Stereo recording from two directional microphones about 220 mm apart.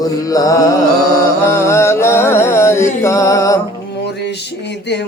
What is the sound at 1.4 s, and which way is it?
Music, 10° left (ahead or behind).